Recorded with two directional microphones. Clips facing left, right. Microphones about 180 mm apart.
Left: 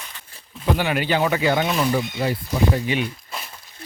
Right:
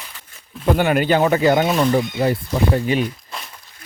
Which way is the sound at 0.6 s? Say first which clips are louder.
Right 5 dB; 50° right (ahead or behind).